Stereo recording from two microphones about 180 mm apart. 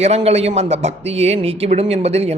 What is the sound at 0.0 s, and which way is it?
Speech, 35° right (ahead or behind).